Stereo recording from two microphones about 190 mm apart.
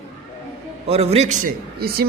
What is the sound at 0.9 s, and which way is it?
Speech, 35° right (ahead or behind).